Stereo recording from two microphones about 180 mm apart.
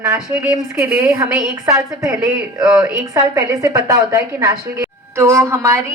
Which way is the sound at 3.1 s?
20° right (ahead or behind).